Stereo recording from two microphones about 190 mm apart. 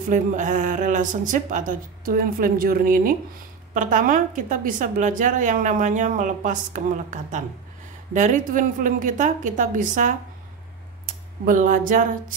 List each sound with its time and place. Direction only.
0.1 s a woman's voice: 40° right (ahead or behind)
11.4 s a woman's voice: 45° right (ahead or behind)